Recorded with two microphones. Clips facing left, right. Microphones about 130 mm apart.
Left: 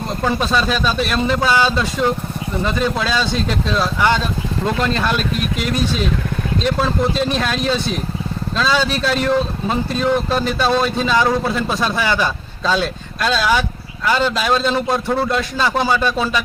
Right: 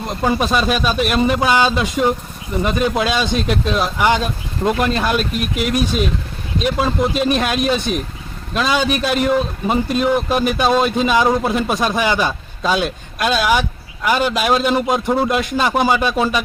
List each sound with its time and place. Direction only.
0.3 s speech: 15° right (ahead or behind)